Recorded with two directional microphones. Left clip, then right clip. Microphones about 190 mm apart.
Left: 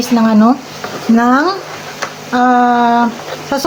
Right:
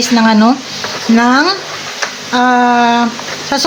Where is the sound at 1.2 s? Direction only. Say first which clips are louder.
Right 2 dB; 5° right (ahead or behind).